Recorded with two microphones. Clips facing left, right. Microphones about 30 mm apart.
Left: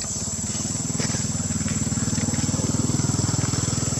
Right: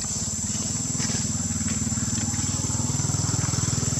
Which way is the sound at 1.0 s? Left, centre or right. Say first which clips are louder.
Left 1 dB; left.